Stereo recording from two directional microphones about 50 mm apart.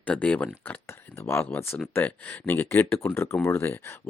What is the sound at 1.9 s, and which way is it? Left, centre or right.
Speech, left.